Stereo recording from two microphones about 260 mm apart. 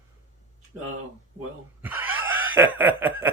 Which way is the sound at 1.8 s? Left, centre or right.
Centre.